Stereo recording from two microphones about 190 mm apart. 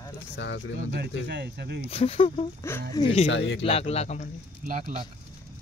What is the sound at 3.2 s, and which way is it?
Speech, 75° left (ahead or behind).